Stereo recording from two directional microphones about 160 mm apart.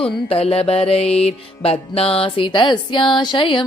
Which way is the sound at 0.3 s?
35° left (ahead or behind).